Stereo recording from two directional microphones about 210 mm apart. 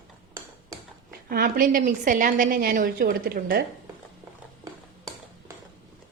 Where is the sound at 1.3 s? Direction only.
45° right (ahead or behind).